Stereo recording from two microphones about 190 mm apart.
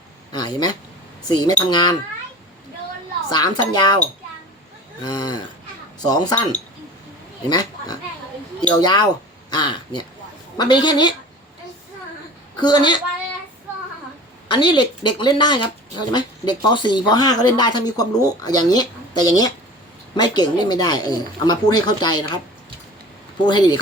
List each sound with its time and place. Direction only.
0.3 s speech: 20° left (ahead or behind)
3.2 s speech: 20° left (ahead or behind)
5.0 s speech: 20° left (ahead or behind)
7.5 s speech: 20° left (ahead or behind)
12.5 s a woman's voice: 20° left (ahead or behind)
14.4 s speech: 25° left (ahead or behind)
23.5 s speech: 20° left (ahead or behind)